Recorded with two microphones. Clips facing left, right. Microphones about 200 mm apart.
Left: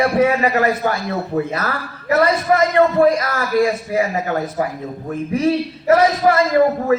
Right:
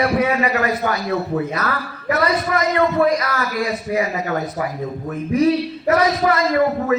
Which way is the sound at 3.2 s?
25° left (ahead or behind).